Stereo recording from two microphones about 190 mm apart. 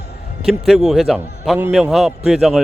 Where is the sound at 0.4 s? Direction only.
Centre (ahead or behind).